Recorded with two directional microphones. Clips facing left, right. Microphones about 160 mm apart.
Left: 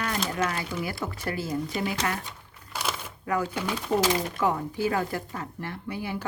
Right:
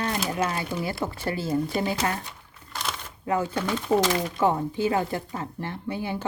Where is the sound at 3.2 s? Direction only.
25° right (ahead or behind).